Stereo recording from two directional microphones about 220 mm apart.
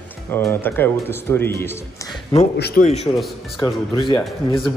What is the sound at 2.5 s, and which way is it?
Speech, 50° left (ahead or behind).